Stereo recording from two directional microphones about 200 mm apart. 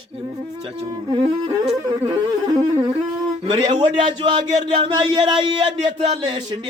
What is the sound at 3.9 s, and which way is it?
Speech, 25° right (ahead or behind).